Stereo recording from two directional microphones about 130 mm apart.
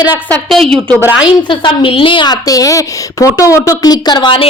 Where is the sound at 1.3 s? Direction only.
40° left (ahead or behind).